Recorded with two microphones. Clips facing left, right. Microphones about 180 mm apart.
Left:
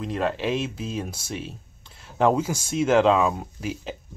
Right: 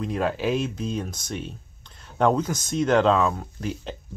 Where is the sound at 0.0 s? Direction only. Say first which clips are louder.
Right 1 dB; centre (ahead or behind).